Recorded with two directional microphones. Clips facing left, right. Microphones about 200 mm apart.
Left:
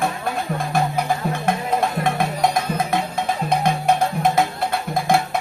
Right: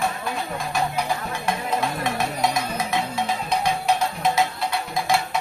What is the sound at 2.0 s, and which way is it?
Music, 55° left (ahead or behind).